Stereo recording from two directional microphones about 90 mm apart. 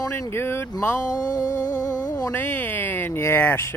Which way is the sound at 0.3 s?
25° left (ahead or behind).